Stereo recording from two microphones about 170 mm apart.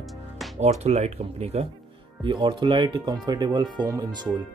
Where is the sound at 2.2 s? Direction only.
30° right (ahead or behind).